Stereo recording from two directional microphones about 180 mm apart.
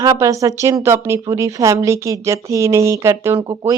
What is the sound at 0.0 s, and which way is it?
A woman's voice, 20° right (ahead or behind).